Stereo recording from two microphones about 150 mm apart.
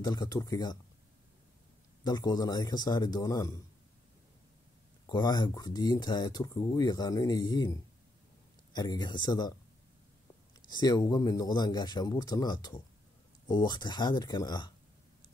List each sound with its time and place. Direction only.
0.0 s speech: 25° left (ahead or behind)
2.0 s speech: 25° left (ahead or behind)
5.1 s speech: 25° left (ahead or behind)
8.7 s speech: 25° left (ahead or behind)
10.7 s speech: 25° left (ahead or behind)